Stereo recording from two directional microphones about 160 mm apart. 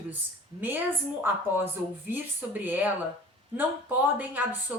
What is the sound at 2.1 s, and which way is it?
A woman's voice, 10° right (ahead or behind).